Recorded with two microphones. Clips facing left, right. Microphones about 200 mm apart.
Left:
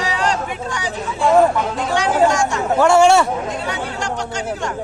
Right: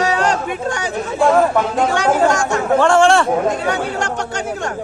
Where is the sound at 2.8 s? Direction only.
5° left (ahead or behind).